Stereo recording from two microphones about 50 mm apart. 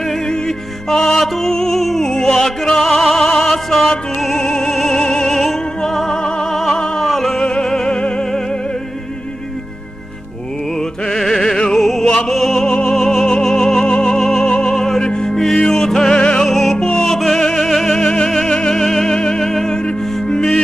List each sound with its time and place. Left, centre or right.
0.8 s music: centre
7.3 s music: centre
11.1 s music: centre
16.4 s music: centre